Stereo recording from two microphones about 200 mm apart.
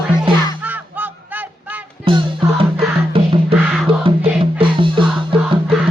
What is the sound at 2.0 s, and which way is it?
Music, 25° right (ahead or behind).